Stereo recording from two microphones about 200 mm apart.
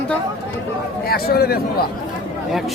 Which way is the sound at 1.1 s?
50° left (ahead or behind).